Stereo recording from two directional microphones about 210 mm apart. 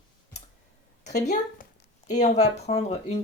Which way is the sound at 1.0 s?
35° left (ahead or behind).